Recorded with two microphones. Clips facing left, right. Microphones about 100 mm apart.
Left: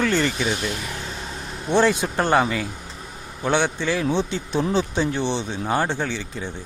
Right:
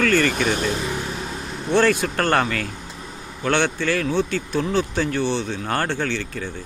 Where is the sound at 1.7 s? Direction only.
15° left (ahead or behind).